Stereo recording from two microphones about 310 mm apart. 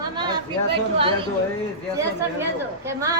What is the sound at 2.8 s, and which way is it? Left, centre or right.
Speech, centre.